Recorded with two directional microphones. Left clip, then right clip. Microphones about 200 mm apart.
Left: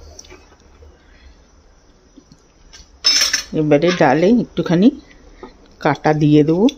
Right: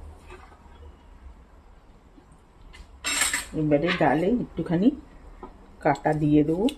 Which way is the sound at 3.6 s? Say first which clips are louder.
Left 9 dB; 50° left (ahead or behind).